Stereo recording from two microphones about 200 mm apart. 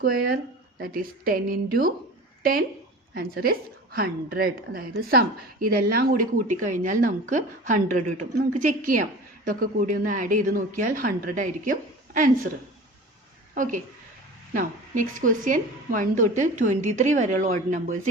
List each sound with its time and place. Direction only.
0.0 s speech: 45° right (ahead or behind)
13.5 s a woman's voice: 40° right (ahead or behind)